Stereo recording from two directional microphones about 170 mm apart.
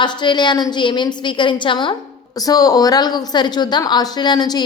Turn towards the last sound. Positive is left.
turn(degrees=25)  # may be behind; listen again after turning